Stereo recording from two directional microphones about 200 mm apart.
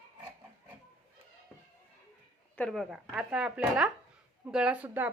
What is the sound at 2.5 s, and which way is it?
Speech, 5° left (ahead or behind).